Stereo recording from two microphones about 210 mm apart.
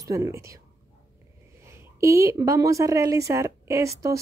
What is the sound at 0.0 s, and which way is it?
Speech, 15° right (ahead or behind).